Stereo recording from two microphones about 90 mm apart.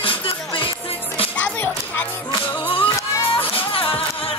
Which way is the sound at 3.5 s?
90° left.